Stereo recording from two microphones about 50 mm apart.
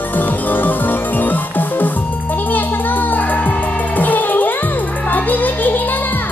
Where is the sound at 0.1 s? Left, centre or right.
Left.